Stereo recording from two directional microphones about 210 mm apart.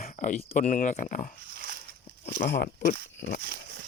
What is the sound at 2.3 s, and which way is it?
Speech, 35° left (ahead or behind).